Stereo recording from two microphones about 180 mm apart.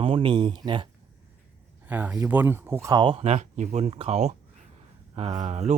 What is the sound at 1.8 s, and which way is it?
Speech, 10° right (ahead or behind).